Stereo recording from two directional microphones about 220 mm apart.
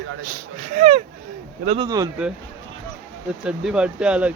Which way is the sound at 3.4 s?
5° right (ahead or behind).